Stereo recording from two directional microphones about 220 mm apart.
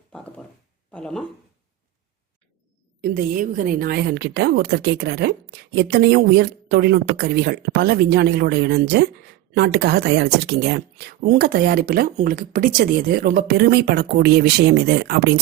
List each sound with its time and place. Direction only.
0.9 s speech: 5° left (ahead or behind)
3.0 s speech: 40° right (ahead or behind)